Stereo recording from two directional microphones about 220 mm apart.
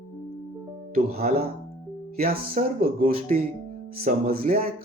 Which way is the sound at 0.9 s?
45° right (ahead or behind).